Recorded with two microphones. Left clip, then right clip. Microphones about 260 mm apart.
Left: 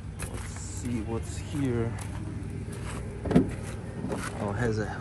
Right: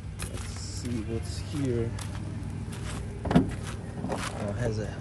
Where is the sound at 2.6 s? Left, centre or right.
Centre.